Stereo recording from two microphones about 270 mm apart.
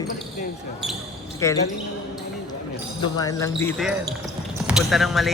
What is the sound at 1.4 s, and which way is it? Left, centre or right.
Speech, centre.